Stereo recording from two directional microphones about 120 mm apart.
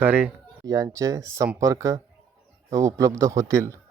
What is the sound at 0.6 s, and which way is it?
A man's voice, 30° right (ahead or behind).